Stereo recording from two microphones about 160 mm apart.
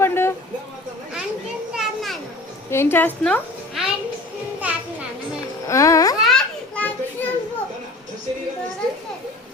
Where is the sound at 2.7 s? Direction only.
15° left (ahead or behind).